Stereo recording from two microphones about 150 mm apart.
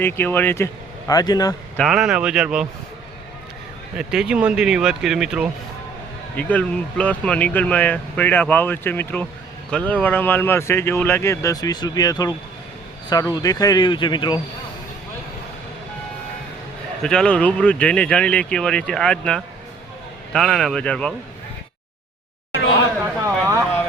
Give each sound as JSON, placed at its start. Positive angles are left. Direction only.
{"t": 0.0, "sound": "speech", "side_deg": 15}
{"t": 1.7, "sound": "speech", "side_deg": 0}
{"t": 3.9, "sound": "speech", "side_deg": -5}
{"t": 6.3, "sound": "speech", "side_deg": 10}
{"t": 17.0, "sound": "speech", "side_deg": 5}
{"t": 23.2, "sound": "a sound", "side_deg": -20}